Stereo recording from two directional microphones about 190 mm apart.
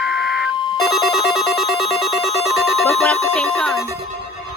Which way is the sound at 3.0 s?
5° left (ahead or behind).